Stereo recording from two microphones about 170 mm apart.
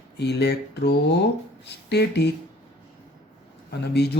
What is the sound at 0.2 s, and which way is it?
Speech, 75° left (ahead or behind).